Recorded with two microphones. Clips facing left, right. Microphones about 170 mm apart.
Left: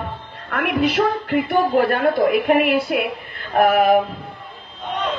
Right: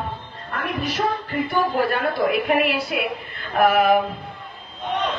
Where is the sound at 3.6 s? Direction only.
50° left (ahead or behind).